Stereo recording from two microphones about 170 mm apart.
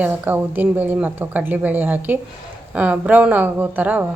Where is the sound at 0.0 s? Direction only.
10° right (ahead or behind).